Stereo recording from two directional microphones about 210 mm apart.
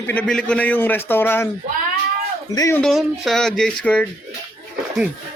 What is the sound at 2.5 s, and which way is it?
Speech, 15° left (ahead or behind).